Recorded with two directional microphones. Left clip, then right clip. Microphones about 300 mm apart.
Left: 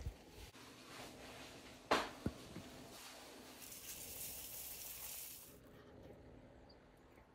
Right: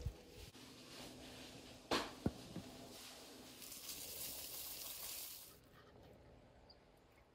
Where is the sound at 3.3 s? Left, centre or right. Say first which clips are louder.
Left 1 dB; centre.